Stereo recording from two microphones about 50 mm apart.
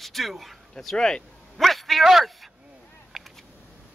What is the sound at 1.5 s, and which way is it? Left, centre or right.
Speech, centre.